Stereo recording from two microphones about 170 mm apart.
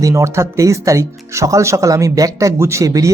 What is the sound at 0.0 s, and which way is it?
Speech, 15° right (ahead or behind).